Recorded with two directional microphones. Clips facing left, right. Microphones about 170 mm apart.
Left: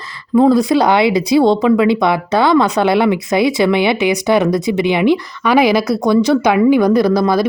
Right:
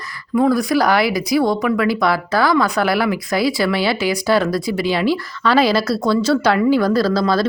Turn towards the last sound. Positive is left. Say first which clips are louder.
# left 4 dB
turn(degrees=15)  # may be behind; listen again after turning